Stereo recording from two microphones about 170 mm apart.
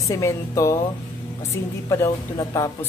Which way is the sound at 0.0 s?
20° left (ahead or behind).